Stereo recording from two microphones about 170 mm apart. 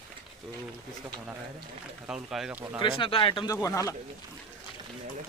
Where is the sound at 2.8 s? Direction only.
30° left (ahead or behind).